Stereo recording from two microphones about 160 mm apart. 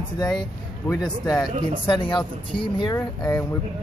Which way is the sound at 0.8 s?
20° left (ahead or behind).